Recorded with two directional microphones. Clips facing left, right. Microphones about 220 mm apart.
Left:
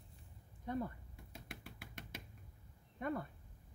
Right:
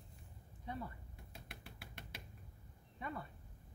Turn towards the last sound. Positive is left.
turn(degrees=50)  # may be behind; listen again after turning